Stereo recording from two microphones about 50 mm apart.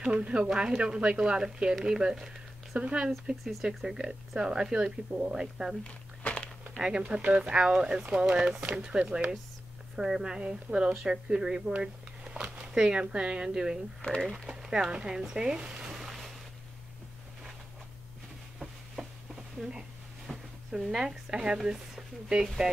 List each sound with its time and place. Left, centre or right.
0.1 s speech: right
2.8 s a woman's voice: right
5.9 s crumpling: left
7.0 s a woman's voice: right
14.6 s a sound: centre
18.6 s a sound: centre
21.3 s speech: centre
21.5 s a woman's voice: centre